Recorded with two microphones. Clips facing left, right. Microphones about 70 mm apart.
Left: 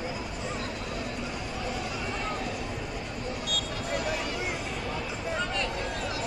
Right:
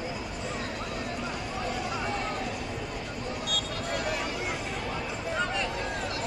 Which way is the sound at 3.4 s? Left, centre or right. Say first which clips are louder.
Even; right.